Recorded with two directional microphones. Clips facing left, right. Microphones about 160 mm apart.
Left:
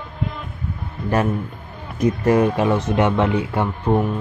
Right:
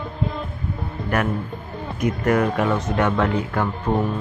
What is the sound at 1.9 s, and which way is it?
Speech, 30° left (ahead or behind).